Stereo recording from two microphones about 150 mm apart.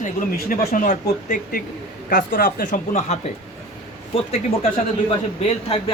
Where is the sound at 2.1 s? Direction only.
75° left (ahead or behind); by 4.7 s 45° left (ahead or behind).